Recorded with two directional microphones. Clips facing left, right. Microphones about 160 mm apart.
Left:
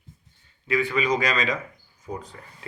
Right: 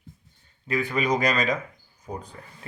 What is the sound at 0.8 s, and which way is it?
Speech, 50° right (ahead or behind).